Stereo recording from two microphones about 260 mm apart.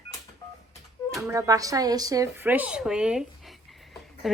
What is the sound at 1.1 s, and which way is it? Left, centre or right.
A woman's voice, centre.